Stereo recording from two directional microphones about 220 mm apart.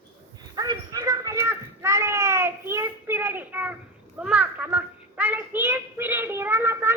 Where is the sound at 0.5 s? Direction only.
20° right (ahead or behind).